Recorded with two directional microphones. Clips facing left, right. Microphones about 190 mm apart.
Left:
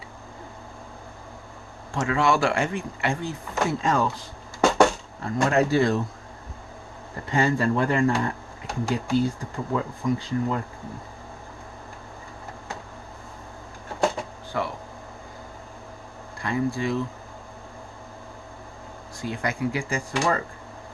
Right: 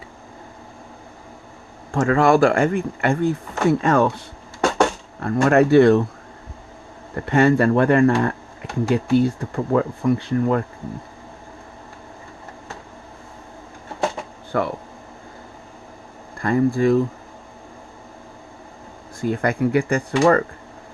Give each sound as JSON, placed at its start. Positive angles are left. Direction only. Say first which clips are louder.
{"t": 1.9, "sound": "speech", "louder": "right 7 dB", "side_deg": -50}
{"t": 5.2, "sound": "speech", "louder": "right 6 dB", "side_deg": -60}
{"t": 7.3, "sound": "speech", "louder": "right 7 dB", "side_deg": -65}
{"t": 8.6, "sound": "a sound", "louder": "right 5 dB", "side_deg": -65}
{"t": 9.1, "sound": "speech", "louder": "right 5 dB", "side_deg": -65}
{"t": 14.5, "sound": "speech", "louder": "right 6 dB", "side_deg": -55}
{"t": 16.4, "sound": "speech", "louder": "right 8 dB", "side_deg": -50}
{"t": 19.2, "sound": "speech", "louder": "right 7 dB", "side_deg": -55}